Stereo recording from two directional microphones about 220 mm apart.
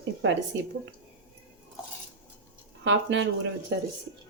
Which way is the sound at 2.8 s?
55° right (ahead or behind).